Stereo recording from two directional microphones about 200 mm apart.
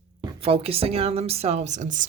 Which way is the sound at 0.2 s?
25° right (ahead or behind).